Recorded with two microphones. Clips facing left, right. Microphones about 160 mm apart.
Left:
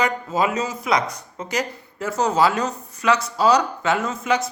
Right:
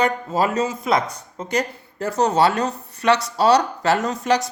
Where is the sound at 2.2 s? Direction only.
35° right (ahead or behind).